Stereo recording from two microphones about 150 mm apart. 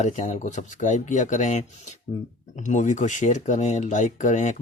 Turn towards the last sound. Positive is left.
turn(degrees=55)  # may be behind; listen again after turning